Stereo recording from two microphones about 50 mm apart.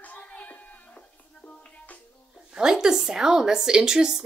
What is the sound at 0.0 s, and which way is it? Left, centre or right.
Music, left.